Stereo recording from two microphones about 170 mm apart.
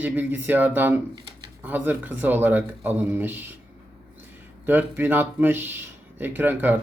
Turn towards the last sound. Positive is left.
turn(degrees=-10)  # may be behind; listen again after turning